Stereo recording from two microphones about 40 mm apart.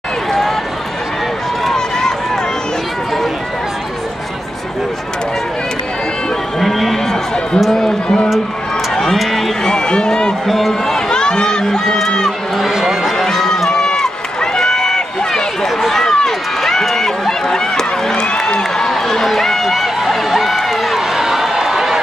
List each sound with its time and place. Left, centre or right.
1.7 s run: centre
6.6 s a sound: centre
7.7 s a man's voice: centre
8.9 s run: centre
9.7 s run: centre
10.4 s run: centre
10.7 s run: centre
12.5 s run: centre; by 18.4 s left
18.6 s a sound: centre